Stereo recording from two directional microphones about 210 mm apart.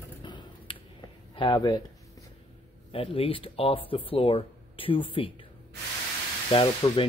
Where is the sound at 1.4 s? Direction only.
20° left (ahead or behind).